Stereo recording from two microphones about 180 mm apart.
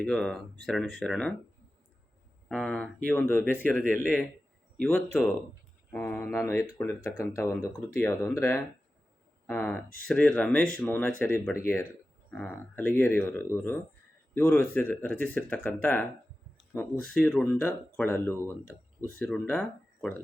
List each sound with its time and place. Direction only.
0.0 s speech: 5° left (ahead or behind)
2.5 s speech: 5° left (ahead or behind)